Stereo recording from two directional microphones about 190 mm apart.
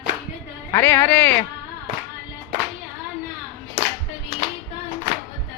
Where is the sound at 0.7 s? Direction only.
10° left (ahead or behind).